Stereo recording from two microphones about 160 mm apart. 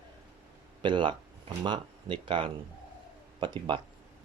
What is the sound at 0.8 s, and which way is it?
Speech, 30° right (ahead or behind).